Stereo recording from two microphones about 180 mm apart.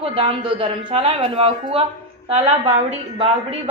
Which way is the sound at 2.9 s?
35° right (ahead or behind).